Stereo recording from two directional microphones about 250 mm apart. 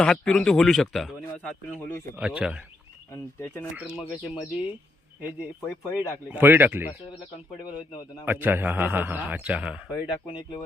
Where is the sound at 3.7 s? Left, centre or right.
Centre.